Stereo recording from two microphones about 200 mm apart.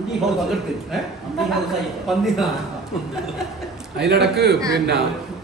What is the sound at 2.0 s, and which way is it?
Speech, centre (ahead or behind).